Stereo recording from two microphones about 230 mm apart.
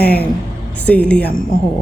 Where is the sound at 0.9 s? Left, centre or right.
Centre.